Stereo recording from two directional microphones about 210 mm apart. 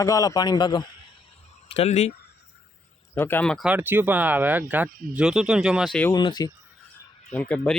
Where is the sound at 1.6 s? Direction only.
30° left (ahead or behind).